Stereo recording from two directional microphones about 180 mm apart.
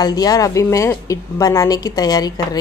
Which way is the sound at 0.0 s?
20° left (ahead or behind).